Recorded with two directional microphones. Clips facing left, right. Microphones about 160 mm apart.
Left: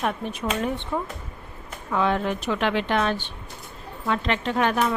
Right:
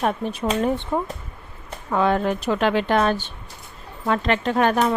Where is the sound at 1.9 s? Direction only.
45° right (ahead or behind).